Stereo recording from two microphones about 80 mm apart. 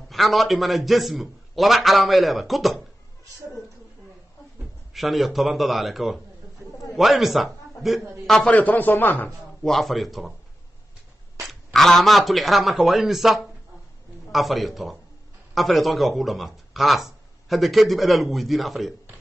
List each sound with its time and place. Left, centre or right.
0.1 s speech: centre
4.9 s a man's voice: centre
8.3 s a man's voice: centre
9.6 s speech: centre
11.4 s a man's voice: centre